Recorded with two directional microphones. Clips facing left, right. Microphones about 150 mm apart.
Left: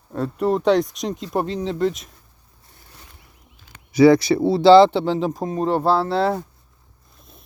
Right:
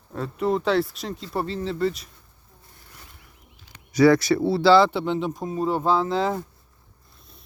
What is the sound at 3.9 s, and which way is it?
Speech, 15° left (ahead or behind).